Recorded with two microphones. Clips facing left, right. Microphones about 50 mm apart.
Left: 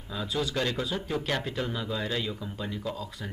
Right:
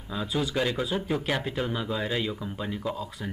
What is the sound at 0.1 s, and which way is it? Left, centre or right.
Speech, centre.